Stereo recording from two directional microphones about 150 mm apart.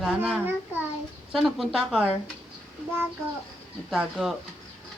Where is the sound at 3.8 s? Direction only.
Centre (ahead or behind).